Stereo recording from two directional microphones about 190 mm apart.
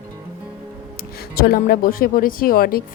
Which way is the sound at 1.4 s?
50° left (ahead or behind).